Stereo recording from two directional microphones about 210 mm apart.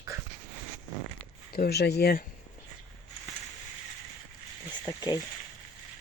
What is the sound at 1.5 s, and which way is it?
Speech, 50° left (ahead or behind).